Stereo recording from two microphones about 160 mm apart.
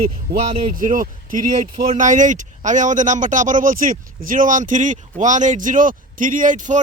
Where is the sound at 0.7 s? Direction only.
60° right (ahead or behind).